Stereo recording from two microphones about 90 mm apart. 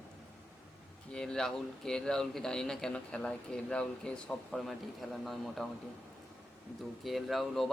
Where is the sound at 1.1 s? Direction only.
5° left (ahead or behind).